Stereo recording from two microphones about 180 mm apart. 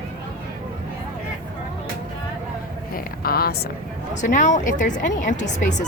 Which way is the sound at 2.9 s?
55° left (ahead or behind).